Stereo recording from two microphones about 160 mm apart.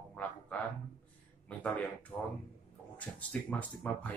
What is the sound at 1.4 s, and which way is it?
Speech, 10° left (ahead or behind).